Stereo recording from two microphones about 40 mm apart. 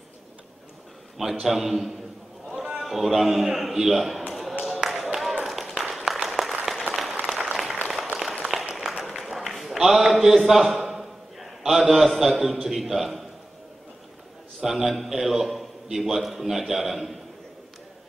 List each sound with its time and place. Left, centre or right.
1.4 s a man's voice: centre
4.3 s tap: centre
4.6 s a sound: centre
6.2 s applause: centre
8.5 s a sound: centre
10.1 s a man's voice: centre
10.8 s a sound: centre
12.6 s a man's voice: centre
14.6 s a man's voice: centre